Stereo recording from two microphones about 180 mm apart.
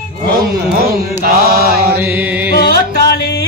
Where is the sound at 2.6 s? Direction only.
55° left (ahead or behind).